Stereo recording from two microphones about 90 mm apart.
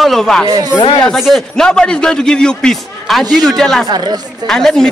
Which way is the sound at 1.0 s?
Centre (ahead or behind).